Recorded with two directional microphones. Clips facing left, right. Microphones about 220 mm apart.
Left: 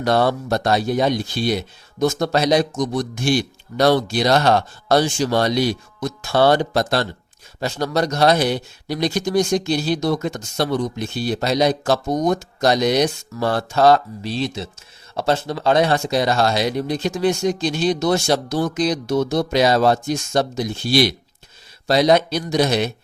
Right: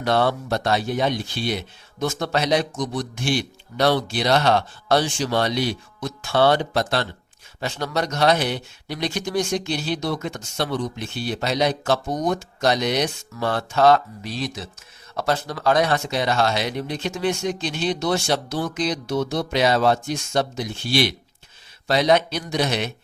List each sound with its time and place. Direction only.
0.0 s speech: 40° left (ahead or behind)